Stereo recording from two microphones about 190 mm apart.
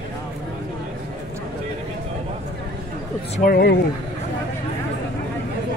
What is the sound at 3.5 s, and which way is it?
Speech, 55° left (ahead or behind).